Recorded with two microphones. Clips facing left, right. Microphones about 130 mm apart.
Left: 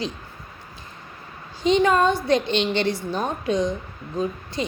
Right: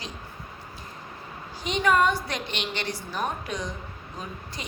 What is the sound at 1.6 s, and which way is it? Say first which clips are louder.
Speech: left 5 dB; 25° left (ahead or behind).